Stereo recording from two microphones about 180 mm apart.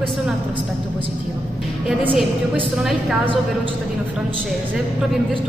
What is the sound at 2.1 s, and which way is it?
A woman's voice, centre (ahead or behind).